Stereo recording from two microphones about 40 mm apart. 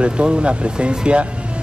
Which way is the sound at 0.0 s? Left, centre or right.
Right.